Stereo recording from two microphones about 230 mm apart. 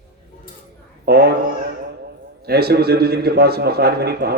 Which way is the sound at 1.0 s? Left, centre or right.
Right.